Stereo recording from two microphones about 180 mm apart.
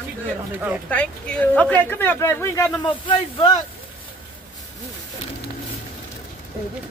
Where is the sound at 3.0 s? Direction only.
30° left (ahead or behind).